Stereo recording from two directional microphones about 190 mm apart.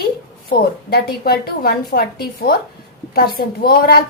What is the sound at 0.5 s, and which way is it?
A woman's voice, 55° left (ahead or behind).